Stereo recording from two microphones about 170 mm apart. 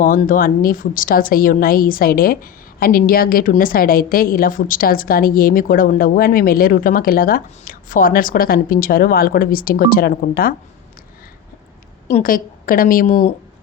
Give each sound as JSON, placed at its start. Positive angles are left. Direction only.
{"t": 0.0, "sound": "a woman's voice", "side_deg": 55}
{"t": 12.0, "sound": "a woman's voice", "side_deg": 55}